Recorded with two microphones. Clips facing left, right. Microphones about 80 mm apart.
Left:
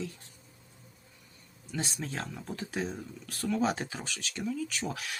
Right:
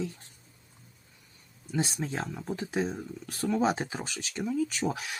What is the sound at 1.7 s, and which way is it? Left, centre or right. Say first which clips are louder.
Speech: right 5 dB; centre.